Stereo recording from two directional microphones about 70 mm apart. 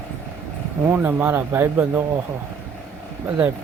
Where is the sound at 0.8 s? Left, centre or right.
Right.